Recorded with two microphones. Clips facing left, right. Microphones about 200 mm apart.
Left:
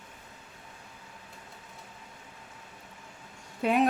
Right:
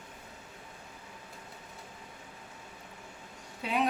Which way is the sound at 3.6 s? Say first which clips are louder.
Left 7 dB; 50° left (ahead or behind).